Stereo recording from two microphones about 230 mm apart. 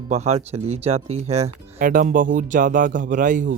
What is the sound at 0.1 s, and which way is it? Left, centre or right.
Speech, right.